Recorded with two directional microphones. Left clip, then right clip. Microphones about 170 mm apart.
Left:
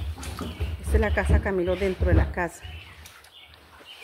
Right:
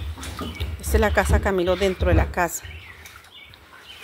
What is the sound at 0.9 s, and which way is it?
Speech, 15° right (ahead or behind).